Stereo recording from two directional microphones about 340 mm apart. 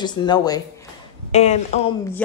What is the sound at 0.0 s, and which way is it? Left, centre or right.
A woman's voice, centre.